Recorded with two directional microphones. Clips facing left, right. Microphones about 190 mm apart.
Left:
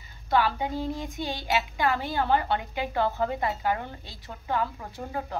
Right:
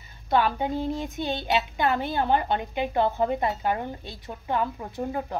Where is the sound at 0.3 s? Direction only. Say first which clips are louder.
Right 2 dB; 20° right (ahead or behind).